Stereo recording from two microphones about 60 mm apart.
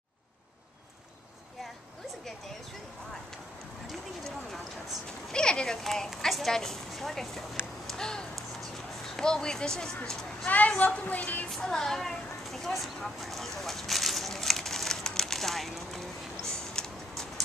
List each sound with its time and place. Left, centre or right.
5.3 s a sound: centre
6.2 s a woman's voice: centre
7.8 s a sound: centre
9.1 s speech: centre
10.4 s a woman's voice: left
11.4 s speech: centre
13.6 s crumpling: centre
16.7 s tick-tock: centre